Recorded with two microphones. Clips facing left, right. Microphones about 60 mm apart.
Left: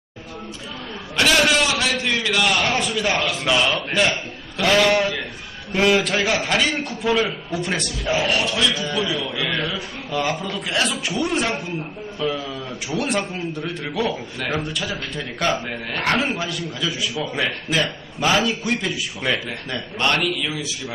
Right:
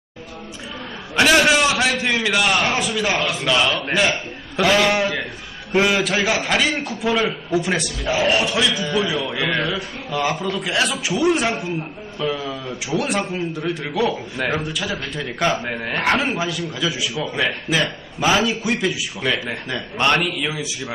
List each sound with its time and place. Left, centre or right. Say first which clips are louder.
1.1 s a man's voice: right 3 dB; centre
4.6 s a man's voice: even; centre
8.2 s a man's voice: right 4 dB; centre
10.1 s a man's voice: right 2 dB; centre
14.3 s a man's voice: right 3 dB; centre
14.6 s a man's voice: right 1 dB; centre
15.9 s a man's voice: right 3 dB; centre
16.1 s a man's voice: right 1 dB; centre
20.0 s a man's voice: right 2 dB; centre